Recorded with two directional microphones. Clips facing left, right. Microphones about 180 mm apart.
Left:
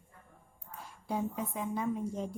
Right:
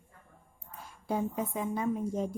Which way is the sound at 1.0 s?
50° right (ahead or behind).